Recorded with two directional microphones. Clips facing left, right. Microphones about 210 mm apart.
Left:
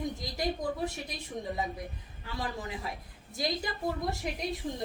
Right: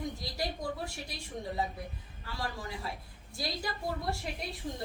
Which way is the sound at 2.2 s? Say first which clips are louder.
Left 2 dB; 20° left (ahead or behind).